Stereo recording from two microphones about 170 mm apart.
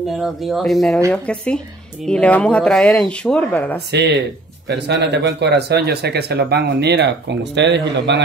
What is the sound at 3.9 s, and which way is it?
Speech, 85° right.